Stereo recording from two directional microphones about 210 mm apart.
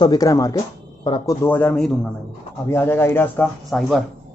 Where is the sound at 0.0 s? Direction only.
20° left (ahead or behind).